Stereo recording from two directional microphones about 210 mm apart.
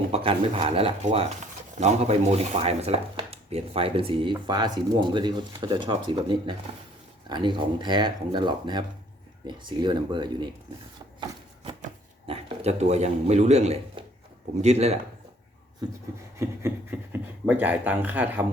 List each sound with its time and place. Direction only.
0.1 s speech: 25° right (ahead or behind)
12.3 s speech: 30° right (ahead or behind)
16.4 s speech: 10° right (ahead or behind)